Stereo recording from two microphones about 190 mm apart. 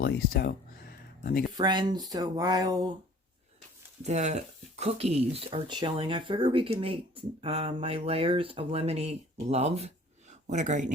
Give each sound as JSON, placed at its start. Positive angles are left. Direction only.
{"t": 0.0, "sound": "a sound", "side_deg": 55}
{"t": 1.5, "sound": "speech", "side_deg": -20}
{"t": 4.0, "sound": "speech", "side_deg": -35}